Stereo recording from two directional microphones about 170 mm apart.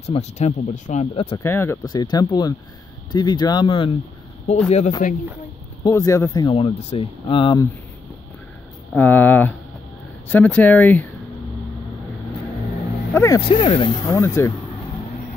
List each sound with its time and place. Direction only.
0.0 s speech: 40° left (ahead or behind)
1.4 s speech: 15° left (ahead or behind); by 4.9 s 40° left (ahead or behind)
5.9 s speech: 20° left (ahead or behind)
6.5 s speech: 35° left (ahead or behind)
8.9 s speech: 10° left (ahead or behind)
13.1 s speech: 15° left (ahead or behind)
13.4 s speech: 30° left (ahead or behind); by 14.5 s 15° left (ahead or behind)